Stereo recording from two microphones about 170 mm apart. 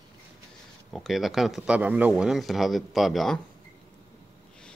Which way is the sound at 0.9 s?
Centre (ahead or behind).